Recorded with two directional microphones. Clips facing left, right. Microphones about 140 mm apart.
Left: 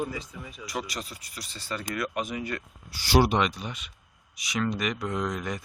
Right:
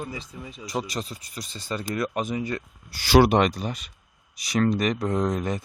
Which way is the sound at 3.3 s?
45° right (ahead or behind).